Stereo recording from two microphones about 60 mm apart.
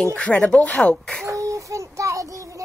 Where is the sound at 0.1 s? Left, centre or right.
Left.